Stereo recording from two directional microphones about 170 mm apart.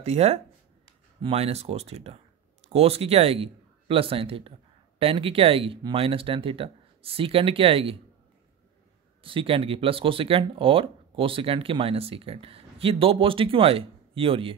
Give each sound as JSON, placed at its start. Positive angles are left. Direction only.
{"t": 0.0, "sound": "speech", "side_deg": -40}
{"t": 9.2, "sound": "speech", "side_deg": -30}